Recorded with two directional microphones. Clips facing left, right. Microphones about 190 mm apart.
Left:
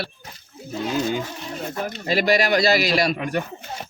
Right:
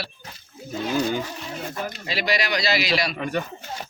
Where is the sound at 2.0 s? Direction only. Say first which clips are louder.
Left 7 dB; 50° left (ahead or behind).